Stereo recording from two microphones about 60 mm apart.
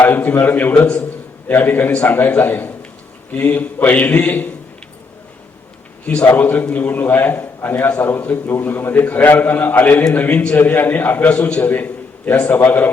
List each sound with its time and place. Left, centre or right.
0.0 s a man's voice: left
6.2 s a man's voice: left
11.3 s a man's voice: centre
11.7 s a sound: left
12.5 s a man's voice: left